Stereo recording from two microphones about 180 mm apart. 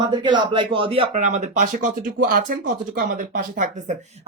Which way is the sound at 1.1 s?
40° right (ahead or behind).